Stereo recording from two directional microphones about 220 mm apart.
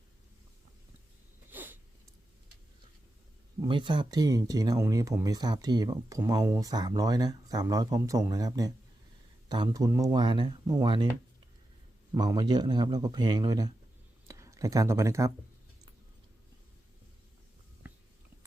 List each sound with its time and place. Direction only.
1.5 s a sound: 10° right (ahead or behind)
3.6 s speech: 20° right (ahead or behind)
12.1 s speech: 15° right (ahead or behind)